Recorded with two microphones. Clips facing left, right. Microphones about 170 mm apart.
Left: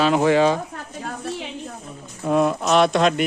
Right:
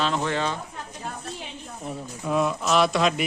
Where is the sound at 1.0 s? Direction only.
75° left (ahead or behind).